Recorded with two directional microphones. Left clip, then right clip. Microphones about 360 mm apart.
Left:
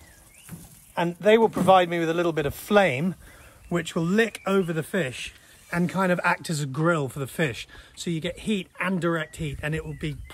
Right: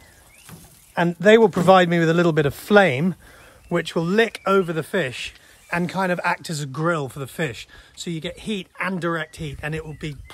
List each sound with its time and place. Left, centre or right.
0.9 s a man's voice: right; by 10.1 s centre